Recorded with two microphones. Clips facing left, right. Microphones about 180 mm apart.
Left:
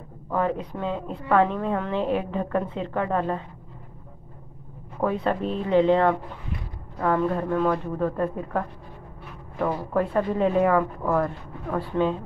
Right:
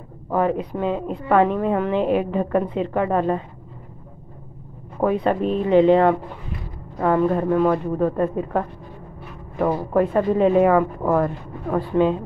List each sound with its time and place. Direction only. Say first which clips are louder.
0.3 s a woman's voice: right 5 dB; 15° right (ahead or behind)
5.0 s a woman's voice: right 5 dB; 15° right (ahead or behind)
9.9 s a woman's voice: right 5 dB; 20° right (ahead or behind)